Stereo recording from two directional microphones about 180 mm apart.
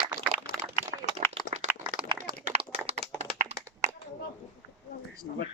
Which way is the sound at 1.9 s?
50° right (ahead or behind).